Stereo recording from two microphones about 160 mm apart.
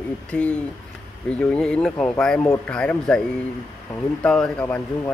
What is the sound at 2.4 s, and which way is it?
Speech, 20° left (ahead or behind).